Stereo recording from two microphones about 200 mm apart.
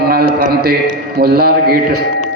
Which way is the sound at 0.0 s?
50° right (ahead or behind).